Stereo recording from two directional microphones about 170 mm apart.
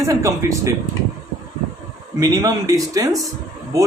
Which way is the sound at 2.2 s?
20° right (ahead or behind).